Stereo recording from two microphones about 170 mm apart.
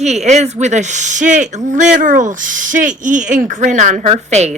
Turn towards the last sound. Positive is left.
turn(degrees=-40)  # may be behind; listen again after turning